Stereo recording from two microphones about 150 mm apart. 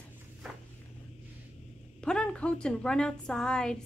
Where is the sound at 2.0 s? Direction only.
5° left (ahead or behind).